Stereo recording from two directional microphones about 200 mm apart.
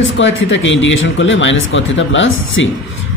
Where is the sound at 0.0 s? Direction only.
70° left (ahead or behind).